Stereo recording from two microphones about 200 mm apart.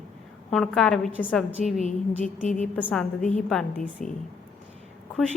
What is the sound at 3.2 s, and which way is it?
Speech, 35° left (ahead or behind).